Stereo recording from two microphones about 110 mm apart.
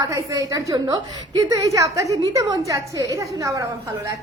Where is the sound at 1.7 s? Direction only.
30° right (ahead or behind).